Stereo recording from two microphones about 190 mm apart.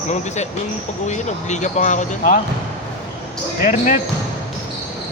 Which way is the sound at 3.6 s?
40° left (ahead or behind).